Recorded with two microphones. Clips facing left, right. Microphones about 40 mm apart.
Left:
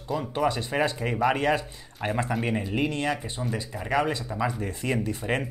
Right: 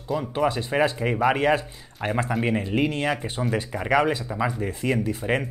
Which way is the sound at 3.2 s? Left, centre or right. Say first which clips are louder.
Right 5 dB; right.